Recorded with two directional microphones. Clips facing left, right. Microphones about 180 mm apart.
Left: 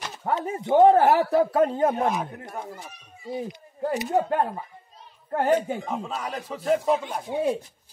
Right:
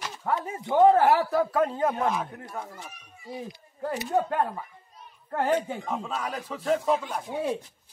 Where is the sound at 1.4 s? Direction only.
30° left (ahead or behind).